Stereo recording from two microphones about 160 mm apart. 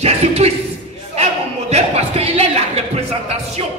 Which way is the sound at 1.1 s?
40° right (ahead or behind).